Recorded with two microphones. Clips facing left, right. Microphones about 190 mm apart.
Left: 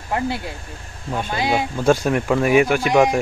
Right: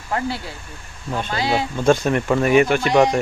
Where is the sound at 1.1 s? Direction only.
10° left (ahead or behind).